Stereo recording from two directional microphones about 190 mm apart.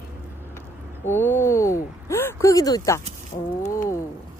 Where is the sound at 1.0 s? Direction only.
10° left (ahead or behind).